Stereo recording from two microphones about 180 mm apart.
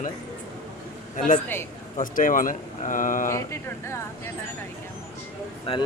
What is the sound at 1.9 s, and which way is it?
Speech, 50° left (ahead or behind).